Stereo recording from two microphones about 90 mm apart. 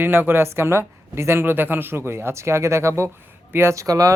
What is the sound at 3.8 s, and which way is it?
Speech, 45° right (ahead or behind).